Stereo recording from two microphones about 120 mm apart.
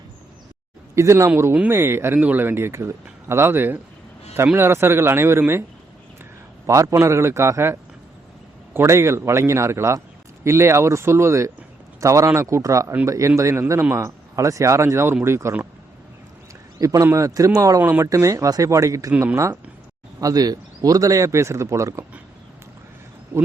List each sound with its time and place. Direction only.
0.9 s speech: 25° right (ahead or behind)
6.7 s speech: 25° right (ahead or behind)
16.8 s speech: 25° right (ahead or behind)
20.2 s speech: 30° right (ahead or behind)
23.3 s speech: 15° right (ahead or behind)